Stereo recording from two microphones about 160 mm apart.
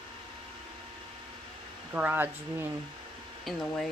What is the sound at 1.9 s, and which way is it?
Speech, 10° right (ahead or behind).